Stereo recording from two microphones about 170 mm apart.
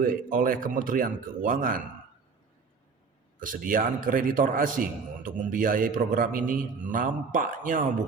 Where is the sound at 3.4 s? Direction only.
55° right (ahead or behind).